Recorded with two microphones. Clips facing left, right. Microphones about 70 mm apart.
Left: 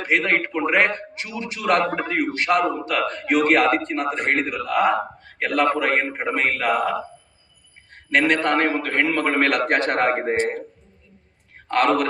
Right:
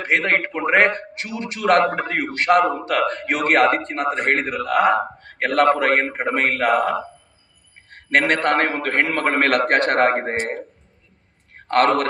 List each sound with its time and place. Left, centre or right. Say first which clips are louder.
0.0 s a man's voice: right 1 dB; right
10.3 s speech: left 2 dB; centre
11.7 s a man's voice: right 2 dB; right